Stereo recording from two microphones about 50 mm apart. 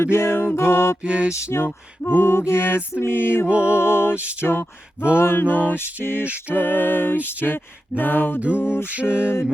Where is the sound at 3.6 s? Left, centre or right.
Left.